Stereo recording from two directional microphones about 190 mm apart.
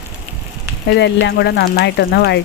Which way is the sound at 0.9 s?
65° left (ahead or behind).